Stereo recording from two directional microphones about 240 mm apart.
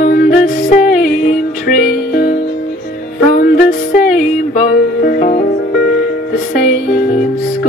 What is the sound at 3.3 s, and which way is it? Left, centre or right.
Music, left.